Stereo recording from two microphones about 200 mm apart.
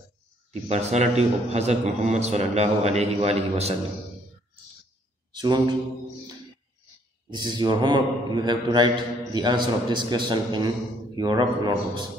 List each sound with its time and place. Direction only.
0.5 s a man's voice: 35° right (ahead or behind)
5.3 s mantra: 20° right (ahead or behind)
7.2 s a man's voice: 20° right (ahead or behind)